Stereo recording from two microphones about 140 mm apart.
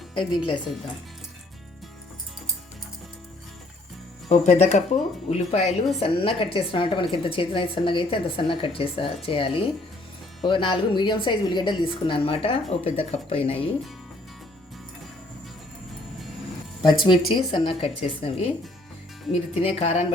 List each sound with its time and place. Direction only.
0.1 s a woman's voice: 35° left (ahead or behind)
4.3 s a woman's voice: 55° left (ahead or behind)
16.8 s a woman's voice: 35° left (ahead or behind)